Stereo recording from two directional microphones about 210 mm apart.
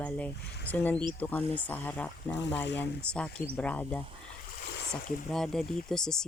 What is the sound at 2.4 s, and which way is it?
Speech, 55° left (ahead or behind).